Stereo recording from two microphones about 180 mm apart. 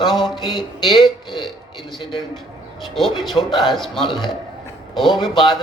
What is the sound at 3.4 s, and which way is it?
Speech, 20° left (ahead or behind).